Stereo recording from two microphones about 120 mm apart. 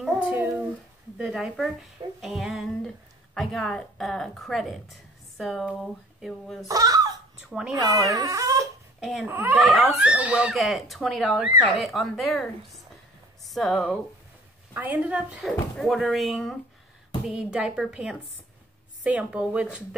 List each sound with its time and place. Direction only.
0.0 s dog: 10° right (ahead or behind)
1.1 s speech: 5° right (ahead or behind)
6.7 s speech: 30° right (ahead or behind)
7.4 s speech: 5° right (ahead or behind)
7.7 s speech: 30° right (ahead or behind)
9.0 s speech: 5° right (ahead or behind)
9.3 s speech: 15° right (ahead or behind)
9.7 s speech: centre (ahead or behind)
14.7 s speech: 15° right (ahead or behind)